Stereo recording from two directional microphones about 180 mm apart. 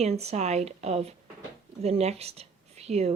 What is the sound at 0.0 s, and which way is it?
Speech, 35° right (ahead or behind).